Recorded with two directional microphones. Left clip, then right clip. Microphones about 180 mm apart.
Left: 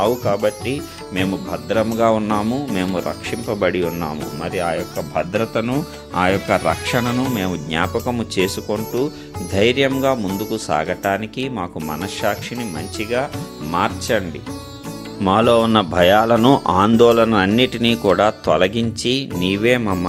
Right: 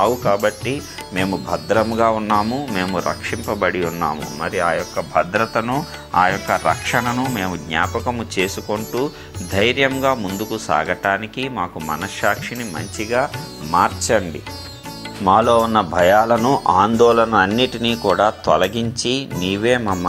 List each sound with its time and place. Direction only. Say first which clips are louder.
0.3 s speech: right 1 dB; 20° left (ahead or behind)
1.5 s speech: right 4 dB; centre (ahead or behind)
2.1 s speech: right 2 dB; 35° left (ahead or behind)
9.0 s speech: left 1 dB; centre (ahead or behind)
9.5 s speech: even; 30° left (ahead or behind)
10.2 s speech: left 1 dB; centre (ahead or behind)
10.5 s speech: right 2 dB; 30° left (ahead or behind)
13.7 s speech: right 4 dB; 15° left (ahead or behind)
15.2 s speech: right 1 dB; 35° left (ahead or behind)